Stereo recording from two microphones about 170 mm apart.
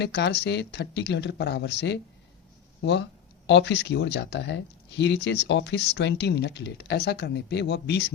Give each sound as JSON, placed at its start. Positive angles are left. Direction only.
{"t": 0.0, "sound": "speech", "side_deg": 80}